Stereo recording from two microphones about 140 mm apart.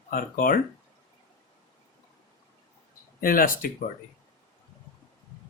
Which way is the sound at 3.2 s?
90° left.